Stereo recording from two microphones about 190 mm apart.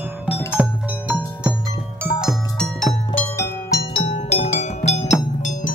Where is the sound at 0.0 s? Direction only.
10° right (ahead or behind).